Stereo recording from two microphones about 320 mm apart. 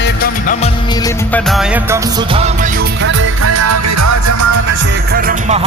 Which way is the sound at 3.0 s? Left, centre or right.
Right.